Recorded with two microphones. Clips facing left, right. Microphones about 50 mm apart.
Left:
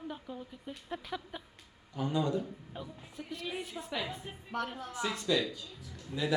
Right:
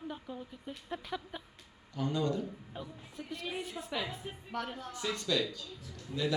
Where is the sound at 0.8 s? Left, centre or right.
Centre.